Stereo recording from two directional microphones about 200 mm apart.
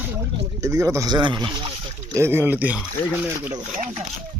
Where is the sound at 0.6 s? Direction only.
15° right (ahead or behind).